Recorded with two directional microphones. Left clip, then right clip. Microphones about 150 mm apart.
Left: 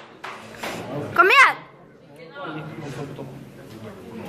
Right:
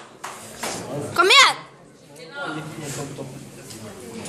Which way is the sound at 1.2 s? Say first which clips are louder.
Even; 20° right (ahead or behind).